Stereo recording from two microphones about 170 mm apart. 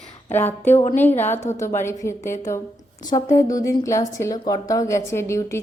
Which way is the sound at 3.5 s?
20° left (ahead or behind).